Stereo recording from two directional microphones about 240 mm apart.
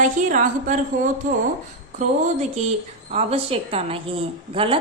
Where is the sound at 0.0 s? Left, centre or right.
Right.